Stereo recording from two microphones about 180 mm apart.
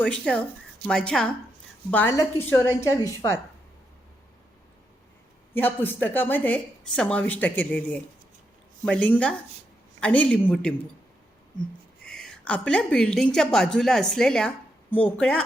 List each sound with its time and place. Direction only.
0.0 s a woman's voice: 5° left (ahead or behind)
5.5 s a woman's voice: 10° left (ahead or behind)
12.0 s a woman's voice: centre (ahead or behind)